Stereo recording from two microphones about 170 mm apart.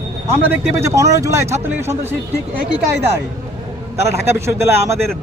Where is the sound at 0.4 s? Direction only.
15° right (ahead or behind).